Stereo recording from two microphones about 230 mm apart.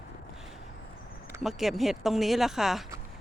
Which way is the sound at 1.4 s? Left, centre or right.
Centre.